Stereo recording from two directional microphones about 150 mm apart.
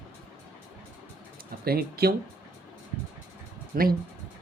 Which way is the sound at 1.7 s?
90° right.